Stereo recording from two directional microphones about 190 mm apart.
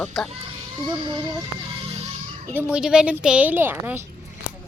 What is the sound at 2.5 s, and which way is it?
A woman's voice, 10° right (ahead or behind).